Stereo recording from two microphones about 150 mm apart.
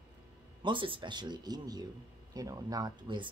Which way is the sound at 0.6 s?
35° right (ahead or behind).